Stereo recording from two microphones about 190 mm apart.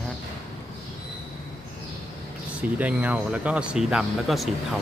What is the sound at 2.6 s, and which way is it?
Speech, 5° right (ahead or behind).